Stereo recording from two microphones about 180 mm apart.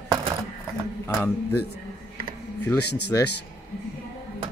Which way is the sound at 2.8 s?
65° left (ahead or behind).